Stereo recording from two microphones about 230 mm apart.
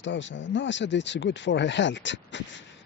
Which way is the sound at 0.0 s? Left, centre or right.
Left.